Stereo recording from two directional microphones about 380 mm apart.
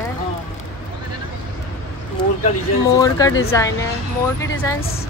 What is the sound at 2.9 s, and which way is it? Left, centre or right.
Speech, centre.